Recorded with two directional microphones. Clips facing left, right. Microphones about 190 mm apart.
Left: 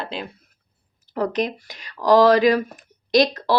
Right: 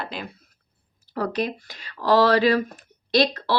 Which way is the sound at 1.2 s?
15° left (ahead or behind).